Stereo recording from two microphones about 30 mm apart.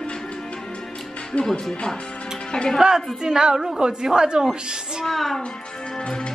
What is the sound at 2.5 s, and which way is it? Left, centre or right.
Speech, left.